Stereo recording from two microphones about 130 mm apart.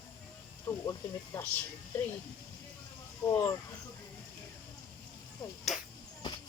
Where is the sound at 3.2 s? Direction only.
25° left (ahead or behind).